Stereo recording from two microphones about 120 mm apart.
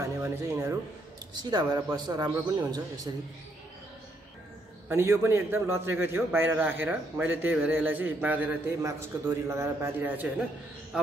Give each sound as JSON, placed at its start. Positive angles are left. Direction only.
{"t": 0.0, "sound": "speech", "side_deg": -20}
{"t": 1.3, "sound": "a man's voice", "side_deg": -35}
{"t": 4.8, "sound": "a man's voice", "side_deg": -20}
{"t": 8.8, "sound": "a man's voice", "side_deg": -25}